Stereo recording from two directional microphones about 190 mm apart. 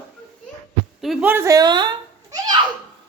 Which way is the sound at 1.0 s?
5° right (ahead or behind).